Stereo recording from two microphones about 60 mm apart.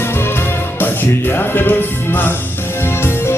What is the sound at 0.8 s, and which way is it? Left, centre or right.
Music, left.